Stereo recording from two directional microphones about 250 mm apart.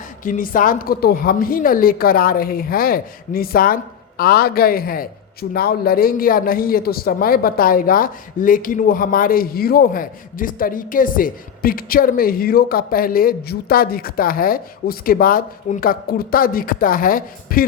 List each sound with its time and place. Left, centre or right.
0.3 s a man's voice: left